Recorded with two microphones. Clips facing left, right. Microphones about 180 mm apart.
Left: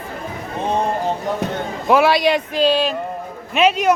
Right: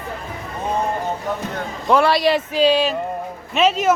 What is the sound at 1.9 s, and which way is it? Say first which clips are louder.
A man's voice: left 1 dB; 5° left (ahead or behind).